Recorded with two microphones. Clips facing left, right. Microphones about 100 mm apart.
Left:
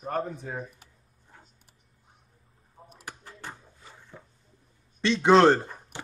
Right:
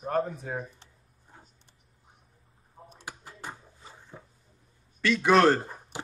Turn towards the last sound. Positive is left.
turn(degrees=20)  # may be behind; listen again after turning